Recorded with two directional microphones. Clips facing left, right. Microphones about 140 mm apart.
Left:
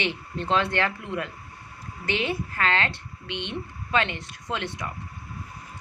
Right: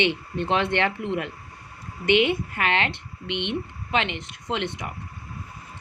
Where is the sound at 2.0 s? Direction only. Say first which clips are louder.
Right 7 dB; 20° right (ahead or behind).